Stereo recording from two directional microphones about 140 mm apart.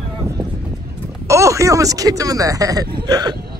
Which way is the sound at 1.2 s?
20° right (ahead or behind).